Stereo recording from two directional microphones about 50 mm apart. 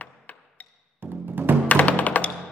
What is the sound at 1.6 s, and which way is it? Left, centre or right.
Music, left.